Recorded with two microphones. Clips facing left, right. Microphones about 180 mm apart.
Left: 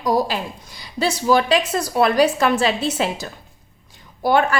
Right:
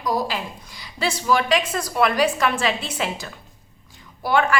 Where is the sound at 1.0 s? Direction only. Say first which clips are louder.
Left 4 dB; 35° left (ahead or behind).